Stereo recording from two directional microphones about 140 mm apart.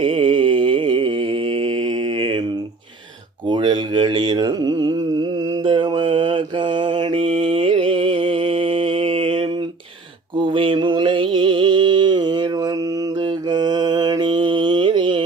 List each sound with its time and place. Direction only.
0.0 s mantra: 40° right (ahead or behind)
3.5 s mantra: 35° right (ahead or behind)
13.5 s mantra: 30° right (ahead or behind)